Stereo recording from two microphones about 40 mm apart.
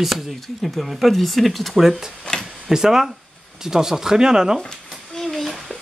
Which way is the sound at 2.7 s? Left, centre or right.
Centre.